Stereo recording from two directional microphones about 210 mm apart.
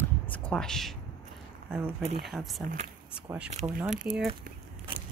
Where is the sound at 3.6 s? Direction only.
15° right (ahead or behind).